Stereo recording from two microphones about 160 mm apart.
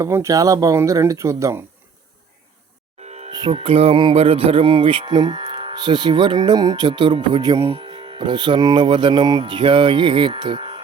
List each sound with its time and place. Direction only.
0.0 s speech: 20° right (ahead or behind)
3.0 s music: 45° right (ahead or behind)
3.3 s speech: 30° right (ahead or behind)